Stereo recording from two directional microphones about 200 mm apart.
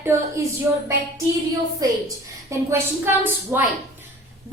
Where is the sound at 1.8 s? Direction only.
20° right (ahead or behind).